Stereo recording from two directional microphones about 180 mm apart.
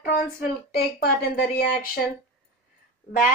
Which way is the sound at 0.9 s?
55° left (ahead or behind).